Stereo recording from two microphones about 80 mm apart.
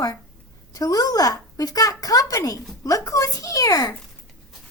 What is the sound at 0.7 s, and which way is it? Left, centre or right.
Speech, left.